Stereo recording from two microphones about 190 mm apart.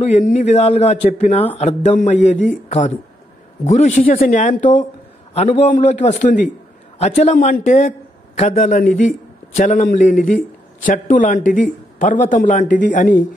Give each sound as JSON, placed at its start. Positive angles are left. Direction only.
{"t": 0.0, "sound": "a man's voice", "side_deg": 40}